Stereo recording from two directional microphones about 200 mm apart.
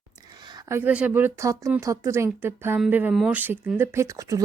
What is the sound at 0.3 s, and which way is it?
Speech, 20° right (ahead or behind).